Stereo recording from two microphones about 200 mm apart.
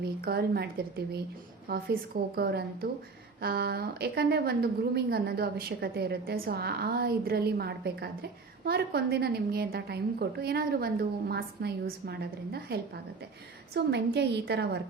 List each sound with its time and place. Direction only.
0.3 s a woman's voice: 50° right (ahead or behind)